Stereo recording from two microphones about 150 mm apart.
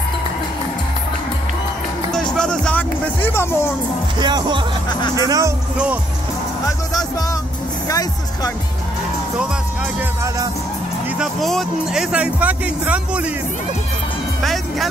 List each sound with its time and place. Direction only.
2.1 s speech: 5° left (ahead or behind)
4.2 s speech: 30° right (ahead or behind)
11.1 s speech: centre (ahead or behind)
14.4 s speech: centre (ahead or behind)